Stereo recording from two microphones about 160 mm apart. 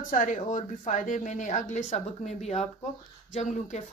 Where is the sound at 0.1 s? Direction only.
55° left (ahead or behind).